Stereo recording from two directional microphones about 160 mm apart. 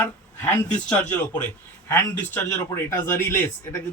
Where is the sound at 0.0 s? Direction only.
10° left (ahead or behind).